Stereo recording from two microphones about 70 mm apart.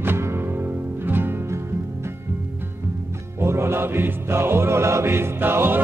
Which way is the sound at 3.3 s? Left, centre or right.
Right.